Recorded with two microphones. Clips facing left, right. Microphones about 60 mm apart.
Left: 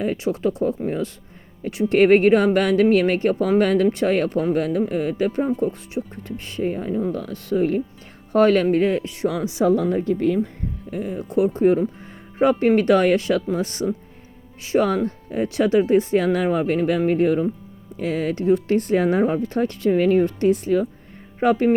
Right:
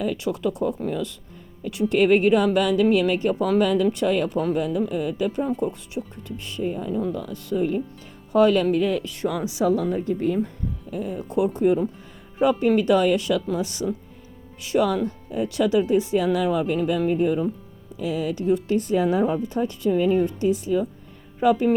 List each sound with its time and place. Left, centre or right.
0.0 s speech: left
1.9 s speech: left
10.9 s speech: left
19.4 s speech: left